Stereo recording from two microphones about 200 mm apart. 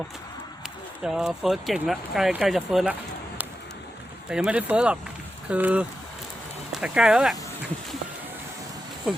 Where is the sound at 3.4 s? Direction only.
10° right (ahead or behind).